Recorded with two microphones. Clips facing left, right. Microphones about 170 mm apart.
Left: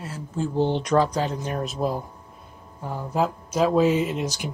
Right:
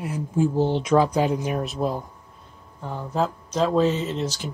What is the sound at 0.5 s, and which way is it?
Speech, centre (ahead or behind).